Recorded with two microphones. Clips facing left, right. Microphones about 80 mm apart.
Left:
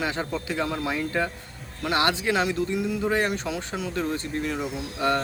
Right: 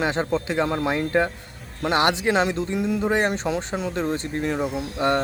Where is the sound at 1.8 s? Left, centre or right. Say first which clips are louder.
Right 3 dB; right.